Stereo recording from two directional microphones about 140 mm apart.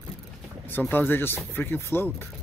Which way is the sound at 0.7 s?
15° left (ahead or behind).